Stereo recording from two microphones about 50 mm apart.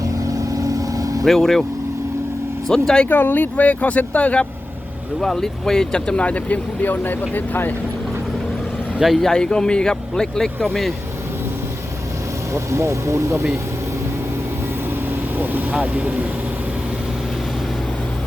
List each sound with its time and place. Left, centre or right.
1.2 s speech: centre
2.6 s a man's voice: centre
3.1 s speech: left
5.2 s speech: centre; by 7.7 s left
9.1 s a man's voice: centre
12.5 s speech: right
15.1 s vehicle: right
15.7 s speech: right